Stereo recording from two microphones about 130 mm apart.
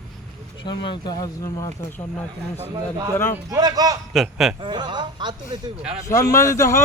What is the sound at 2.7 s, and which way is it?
A man's voice, 30° right (ahead or behind).